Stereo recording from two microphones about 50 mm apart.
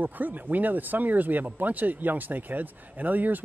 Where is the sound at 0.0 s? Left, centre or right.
Right.